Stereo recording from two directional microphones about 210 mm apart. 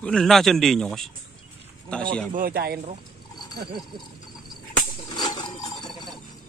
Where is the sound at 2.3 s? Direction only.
45° right (ahead or behind).